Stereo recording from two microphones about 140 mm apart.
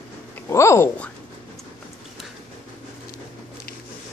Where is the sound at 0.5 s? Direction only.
20° left (ahead or behind).